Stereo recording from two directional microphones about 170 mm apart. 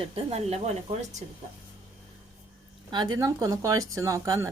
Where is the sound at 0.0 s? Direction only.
35° right (ahead or behind).